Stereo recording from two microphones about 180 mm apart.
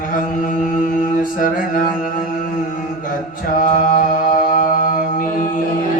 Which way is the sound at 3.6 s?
50° left (ahead or behind).